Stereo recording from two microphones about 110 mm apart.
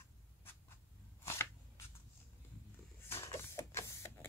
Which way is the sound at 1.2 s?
25° left (ahead or behind).